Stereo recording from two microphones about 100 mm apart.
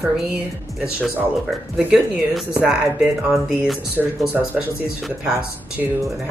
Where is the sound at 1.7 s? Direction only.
10° right (ahead or behind).